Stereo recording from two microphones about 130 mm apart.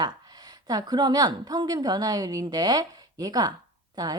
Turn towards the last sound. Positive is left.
turn(degrees=-30)  # may be behind; listen again after turning